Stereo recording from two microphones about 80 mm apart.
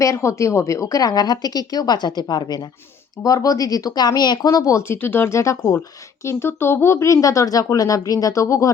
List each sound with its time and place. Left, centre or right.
0.0 s a woman's voice: left
3.2 s speech: left